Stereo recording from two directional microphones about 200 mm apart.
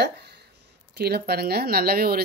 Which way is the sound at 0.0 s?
55° right (ahead or behind).